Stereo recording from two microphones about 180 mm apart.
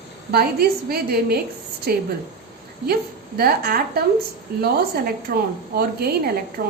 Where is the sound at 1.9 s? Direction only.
60° right (ahead or behind).